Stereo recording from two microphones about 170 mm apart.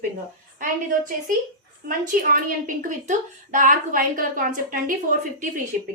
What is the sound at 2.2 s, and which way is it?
A woman's voice, 50° right (ahead or behind).